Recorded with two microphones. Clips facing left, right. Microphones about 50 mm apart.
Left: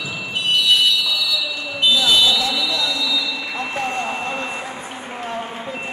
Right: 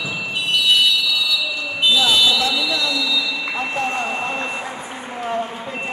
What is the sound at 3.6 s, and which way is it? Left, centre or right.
Vehicle, centre.